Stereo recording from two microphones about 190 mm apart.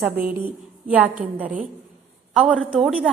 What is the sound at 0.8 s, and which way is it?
Speech, 10° right (ahead or behind).